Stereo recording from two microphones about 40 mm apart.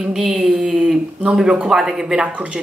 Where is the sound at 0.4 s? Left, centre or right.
Centre.